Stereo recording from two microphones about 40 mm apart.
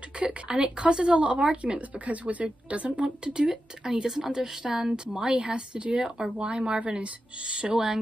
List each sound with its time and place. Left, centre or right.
0.2 s speech: right
3.3 s speech: centre
7.7 s speech: centre